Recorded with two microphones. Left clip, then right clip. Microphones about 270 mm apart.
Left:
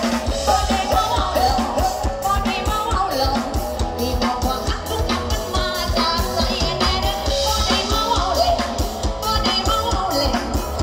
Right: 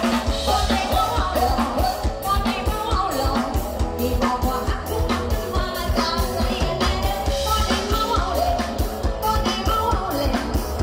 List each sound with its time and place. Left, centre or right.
0.1 s music: centre